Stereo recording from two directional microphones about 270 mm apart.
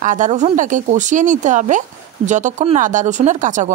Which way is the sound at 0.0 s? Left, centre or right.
Right.